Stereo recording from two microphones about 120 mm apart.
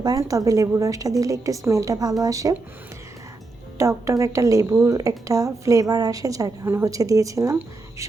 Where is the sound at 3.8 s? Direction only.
25° right (ahead or behind).